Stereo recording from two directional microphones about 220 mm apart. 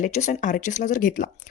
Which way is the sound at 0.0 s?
35° left (ahead or behind).